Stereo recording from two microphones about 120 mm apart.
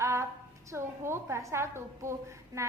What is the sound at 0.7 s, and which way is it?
A woman's voice, 20° right (ahead or behind).